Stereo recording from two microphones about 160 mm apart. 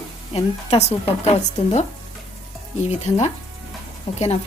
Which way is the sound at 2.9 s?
45° left (ahead or behind).